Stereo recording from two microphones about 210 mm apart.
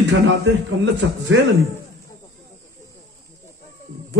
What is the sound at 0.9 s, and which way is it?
Speech, 60° right (ahead or behind).